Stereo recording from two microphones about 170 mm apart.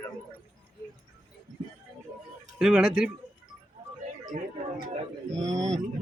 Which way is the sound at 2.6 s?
5° right (ahead or behind).